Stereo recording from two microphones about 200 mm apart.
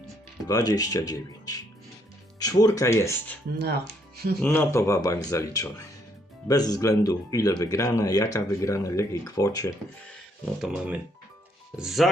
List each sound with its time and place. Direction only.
0.4 s speech: 20° left (ahead or behind)
4.4 s speech: 10° left (ahead or behind)
10.6 s speech: 5° right (ahead or behind)